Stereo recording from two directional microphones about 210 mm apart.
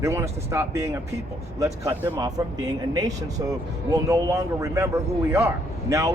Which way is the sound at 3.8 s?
15° right (ahead or behind).